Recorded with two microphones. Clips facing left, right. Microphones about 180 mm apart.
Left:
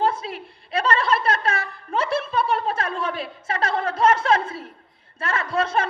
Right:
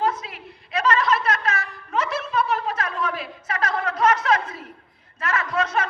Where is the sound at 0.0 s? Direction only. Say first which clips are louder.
Left 2 dB; 30° left (ahead or behind).